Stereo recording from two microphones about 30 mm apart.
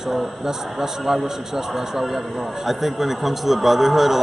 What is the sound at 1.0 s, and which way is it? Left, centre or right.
A man's voice, centre.